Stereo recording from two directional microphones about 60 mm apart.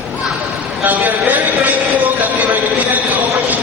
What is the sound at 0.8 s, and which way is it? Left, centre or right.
Speech, right.